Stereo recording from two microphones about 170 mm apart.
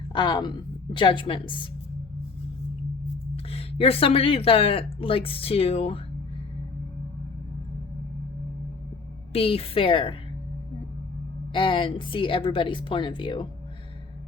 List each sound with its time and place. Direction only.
0.1 s a woman's voice: 25° left (ahead or behind)
3.3 s speech: 35° left (ahead or behind)
9.3 s speech: 35° left (ahead or behind)
11.5 s speech: 30° left (ahead or behind)